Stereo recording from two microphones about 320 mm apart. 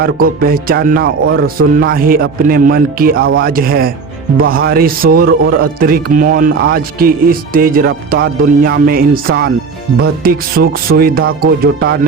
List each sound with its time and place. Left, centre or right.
0.0 s speech: right